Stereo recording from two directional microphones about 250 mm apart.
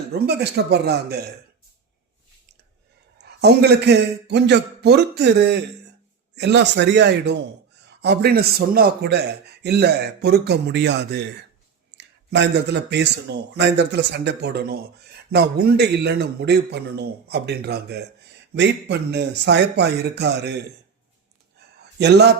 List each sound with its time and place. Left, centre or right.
0.1 s speech: right
3.2 s a man's voice: right
21.8 s a sound: right